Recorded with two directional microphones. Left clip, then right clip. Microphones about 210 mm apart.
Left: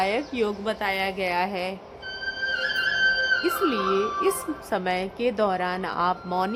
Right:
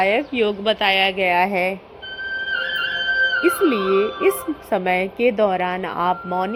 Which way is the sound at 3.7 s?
40° right (ahead or behind).